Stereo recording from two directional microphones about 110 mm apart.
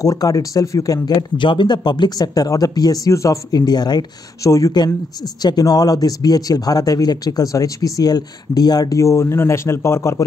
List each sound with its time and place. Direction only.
0.0 s speech: 30° left (ahead or behind)
1.4 s speech: 45° left (ahead or behind); by 10.2 s 25° left (ahead or behind)